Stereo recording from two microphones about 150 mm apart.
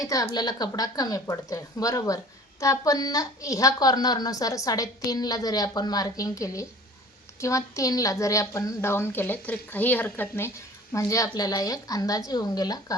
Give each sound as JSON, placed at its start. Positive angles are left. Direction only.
{"t": 0.0, "sound": "a woman's voice", "side_deg": 20}